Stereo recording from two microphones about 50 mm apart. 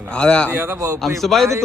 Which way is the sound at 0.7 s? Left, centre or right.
Right.